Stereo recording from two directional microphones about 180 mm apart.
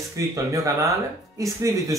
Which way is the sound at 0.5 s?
15° right (ahead or behind).